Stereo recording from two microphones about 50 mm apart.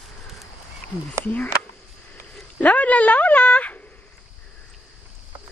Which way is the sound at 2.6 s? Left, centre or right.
Left.